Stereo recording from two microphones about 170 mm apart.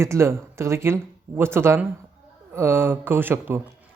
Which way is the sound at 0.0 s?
15° right (ahead or behind).